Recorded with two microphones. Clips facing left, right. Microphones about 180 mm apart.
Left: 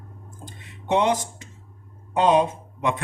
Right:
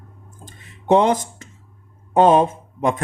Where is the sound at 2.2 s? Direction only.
50° right (ahead or behind).